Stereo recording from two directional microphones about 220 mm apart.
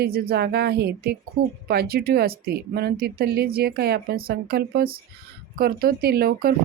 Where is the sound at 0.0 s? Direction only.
45° right (ahead or behind).